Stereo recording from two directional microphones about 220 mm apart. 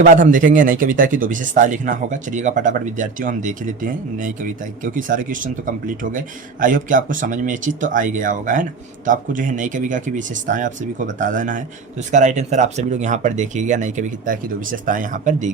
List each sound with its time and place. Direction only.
0.0 s speech: 35° right (ahead or behind)